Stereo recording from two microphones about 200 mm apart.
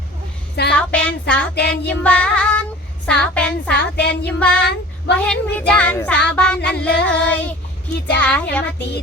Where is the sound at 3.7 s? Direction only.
60° left (ahead or behind).